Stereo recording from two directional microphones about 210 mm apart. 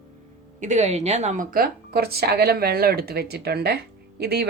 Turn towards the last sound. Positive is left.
turn(degrees=-50)  # may be behind; listen again after turning